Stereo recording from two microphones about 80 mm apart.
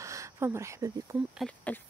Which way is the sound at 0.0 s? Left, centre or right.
Right.